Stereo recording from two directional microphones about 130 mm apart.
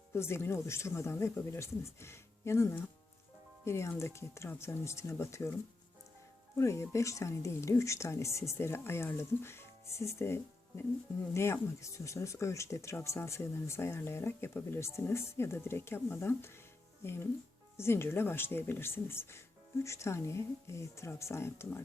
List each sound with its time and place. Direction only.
0.1 s speech: 20° left (ahead or behind)
6.6 s speech: 20° left (ahead or behind)